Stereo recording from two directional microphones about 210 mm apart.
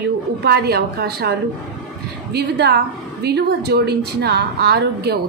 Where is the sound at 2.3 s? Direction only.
50° right (ahead or behind).